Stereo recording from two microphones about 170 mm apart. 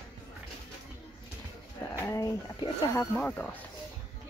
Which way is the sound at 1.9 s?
15° left (ahead or behind).